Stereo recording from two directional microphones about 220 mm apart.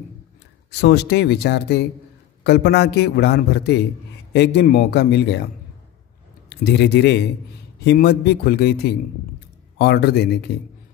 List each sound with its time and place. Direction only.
0.7 s a man's voice: 50° left (ahead or behind)
6.5 s a man's voice: 50° left (ahead or behind)